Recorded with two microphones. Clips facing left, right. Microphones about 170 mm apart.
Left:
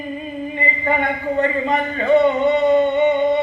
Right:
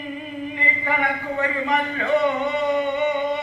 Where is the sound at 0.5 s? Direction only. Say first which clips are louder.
Left 5 dB; 25° left (ahead or behind).